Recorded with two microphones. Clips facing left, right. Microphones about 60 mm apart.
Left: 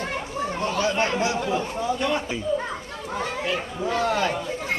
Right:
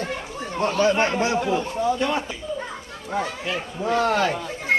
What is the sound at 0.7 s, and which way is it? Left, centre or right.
Speech, right.